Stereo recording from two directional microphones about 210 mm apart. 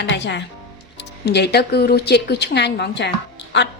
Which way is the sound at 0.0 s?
55° left (ahead or behind).